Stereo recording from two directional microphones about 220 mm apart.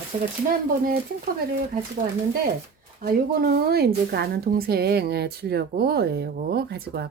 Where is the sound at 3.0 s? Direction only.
40° right (ahead or behind).